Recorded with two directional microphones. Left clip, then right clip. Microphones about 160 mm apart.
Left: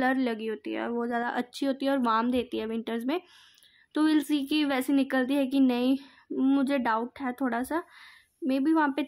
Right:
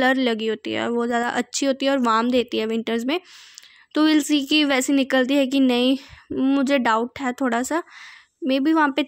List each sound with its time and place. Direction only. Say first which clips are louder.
0.0 s speech: right 8 dB; 25° right (ahead or behind)